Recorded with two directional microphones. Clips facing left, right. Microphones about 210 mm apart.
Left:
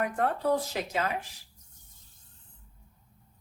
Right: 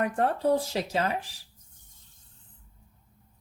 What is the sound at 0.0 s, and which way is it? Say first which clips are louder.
Speech: right 3 dB; 30° right (ahead or behind).